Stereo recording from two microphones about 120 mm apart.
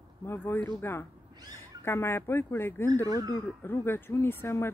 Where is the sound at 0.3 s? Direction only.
15° left (ahead or behind).